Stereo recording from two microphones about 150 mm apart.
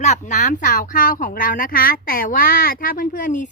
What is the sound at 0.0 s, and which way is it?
A woman's voice, 50° left (ahead or behind).